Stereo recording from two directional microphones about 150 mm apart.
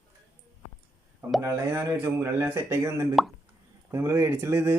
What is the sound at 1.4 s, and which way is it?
Speech, 15° right (ahead or behind).